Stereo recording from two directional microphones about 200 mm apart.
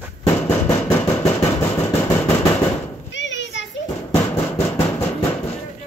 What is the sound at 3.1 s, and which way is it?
Children playing, 65° left (ahead or behind).